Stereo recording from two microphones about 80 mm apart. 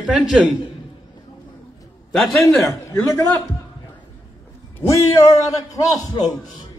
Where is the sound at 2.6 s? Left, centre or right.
Left.